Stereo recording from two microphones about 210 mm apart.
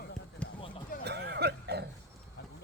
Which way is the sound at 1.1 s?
55° right (ahead or behind).